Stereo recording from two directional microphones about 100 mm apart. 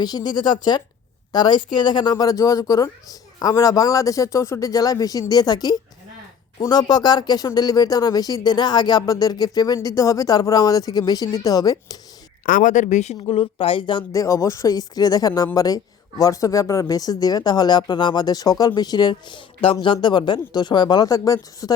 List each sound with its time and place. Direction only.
0.0 s speech: 40° left (ahead or behind)
13.2 s speech: 70° left (ahead or behind)
14.1 s speech: 35° left (ahead or behind)